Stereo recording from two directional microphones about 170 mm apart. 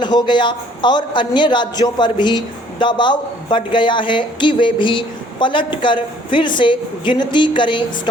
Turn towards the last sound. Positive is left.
turn(degrees=30)  # may be behind; listen again after turning